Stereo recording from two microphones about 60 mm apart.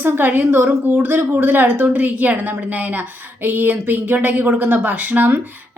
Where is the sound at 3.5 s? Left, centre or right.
Right.